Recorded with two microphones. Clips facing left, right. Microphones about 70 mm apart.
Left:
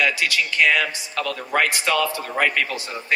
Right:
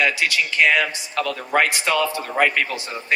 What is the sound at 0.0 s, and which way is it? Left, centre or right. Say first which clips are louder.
A man's voice: right 1 dB; right.